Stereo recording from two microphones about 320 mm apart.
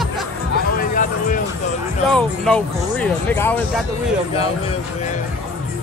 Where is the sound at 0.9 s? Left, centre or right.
Left.